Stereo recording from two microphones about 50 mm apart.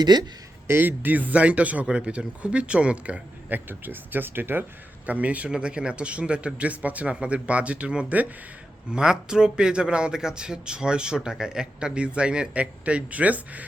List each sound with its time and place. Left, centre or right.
0.7 s speech: right
3.5 s speech: right
5.0 s speech: right